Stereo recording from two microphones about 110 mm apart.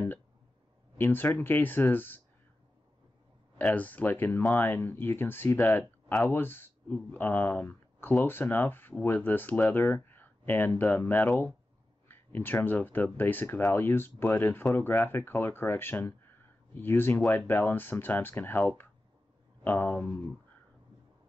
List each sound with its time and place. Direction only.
0.9 s speech: 20° left (ahead or behind)
3.5 s speech: 15° left (ahead or behind)